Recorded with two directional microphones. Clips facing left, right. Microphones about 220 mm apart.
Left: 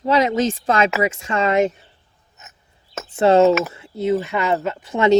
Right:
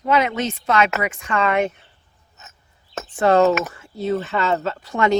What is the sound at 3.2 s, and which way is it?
Speech, 25° left (ahead or behind).